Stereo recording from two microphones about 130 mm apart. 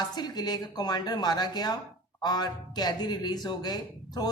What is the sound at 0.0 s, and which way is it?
Speech, 30° left (ahead or behind).